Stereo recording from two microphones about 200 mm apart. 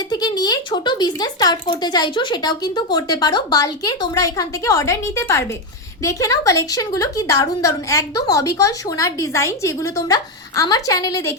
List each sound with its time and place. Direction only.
0.1 s a woman's voice: 20° left (ahead or behind)